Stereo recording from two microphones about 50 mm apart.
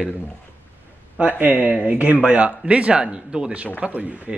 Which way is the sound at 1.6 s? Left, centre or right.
Right.